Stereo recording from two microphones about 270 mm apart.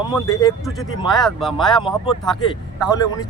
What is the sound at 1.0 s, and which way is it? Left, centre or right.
Speech, centre.